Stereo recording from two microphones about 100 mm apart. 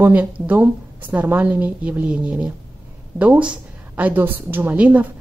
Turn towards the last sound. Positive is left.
turn(degrees=-15)  # may be behind; listen again after turning